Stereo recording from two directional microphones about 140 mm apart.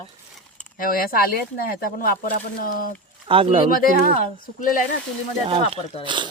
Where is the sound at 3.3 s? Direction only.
40° right (ahead or behind).